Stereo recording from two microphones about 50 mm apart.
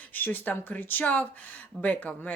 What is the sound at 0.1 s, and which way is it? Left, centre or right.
Speech, left.